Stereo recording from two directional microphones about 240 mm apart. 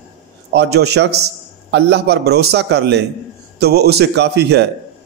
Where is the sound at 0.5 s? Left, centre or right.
Right.